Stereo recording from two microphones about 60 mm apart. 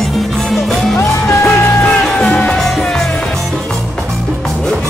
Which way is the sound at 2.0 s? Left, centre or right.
Centre.